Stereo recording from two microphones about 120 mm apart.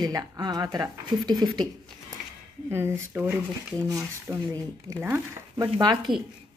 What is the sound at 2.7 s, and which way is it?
Speech, 20° right (ahead or behind).